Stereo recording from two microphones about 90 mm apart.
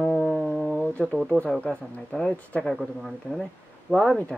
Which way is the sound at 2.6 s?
Centre (ahead or behind).